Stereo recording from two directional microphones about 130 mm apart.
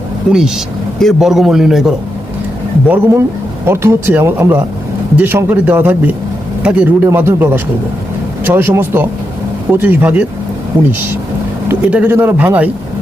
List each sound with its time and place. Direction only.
0.3 s a man's voice: 5° right (ahead or behind)
2.8 s speech: 15° right (ahead or behind)
11.7 s speech: 10° right (ahead or behind)